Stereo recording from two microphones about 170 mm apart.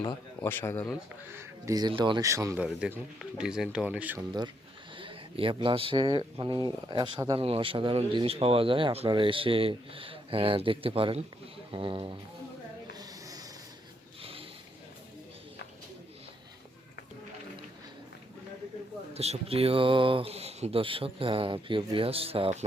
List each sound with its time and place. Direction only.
0.4 s speech: 15° left (ahead or behind)
0.9 s speech: 10° right (ahead or behind)
3.3 s speech: 5° right (ahead or behind)
4.9 s speech: 30° right (ahead or behind)
12.9 s a sound: 20° right (ahead or behind)
14.2 s a sound: 35° right (ahead or behind)
19.1 s speech: 35° right (ahead or behind)